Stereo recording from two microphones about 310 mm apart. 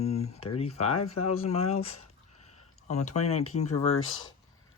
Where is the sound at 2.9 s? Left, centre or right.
Left.